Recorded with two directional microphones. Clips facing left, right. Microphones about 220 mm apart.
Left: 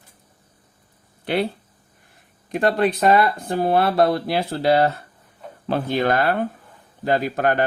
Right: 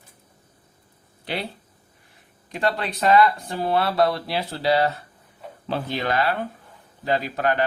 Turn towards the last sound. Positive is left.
turn(degrees=50)  # may be behind; listen again after turning